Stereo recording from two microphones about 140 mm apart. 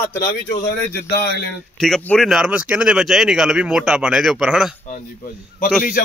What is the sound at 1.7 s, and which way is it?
Speech, centre (ahead or behind).